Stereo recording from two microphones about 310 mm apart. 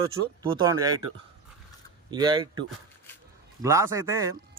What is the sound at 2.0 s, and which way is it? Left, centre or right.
Speech, centre.